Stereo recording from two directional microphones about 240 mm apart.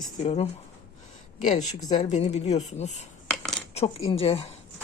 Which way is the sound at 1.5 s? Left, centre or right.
Left.